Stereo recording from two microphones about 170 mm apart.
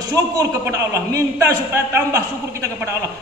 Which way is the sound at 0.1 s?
20° right (ahead or behind).